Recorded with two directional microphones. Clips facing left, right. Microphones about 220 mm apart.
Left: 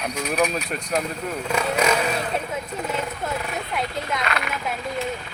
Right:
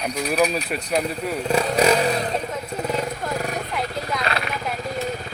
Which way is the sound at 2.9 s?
40° right (ahead or behind).